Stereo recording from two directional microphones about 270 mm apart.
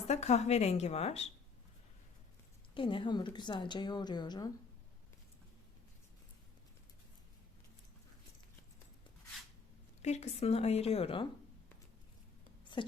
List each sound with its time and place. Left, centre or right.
0.1 s speech: left
2.7 s a woman's voice: centre
10.0 s speech: left